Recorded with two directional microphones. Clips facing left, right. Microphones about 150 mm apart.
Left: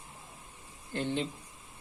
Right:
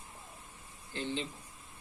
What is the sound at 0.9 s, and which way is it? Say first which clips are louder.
Speech: left 4 dB; 55° left (ahead or behind).